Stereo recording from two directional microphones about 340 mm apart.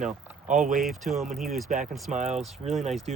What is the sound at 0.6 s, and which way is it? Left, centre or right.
Speech, centre.